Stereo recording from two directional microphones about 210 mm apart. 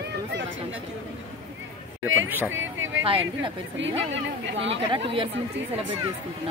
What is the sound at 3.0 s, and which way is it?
Speech, 25° right (ahead or behind).